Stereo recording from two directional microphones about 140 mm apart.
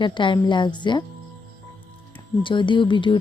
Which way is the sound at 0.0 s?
35° left (ahead or behind).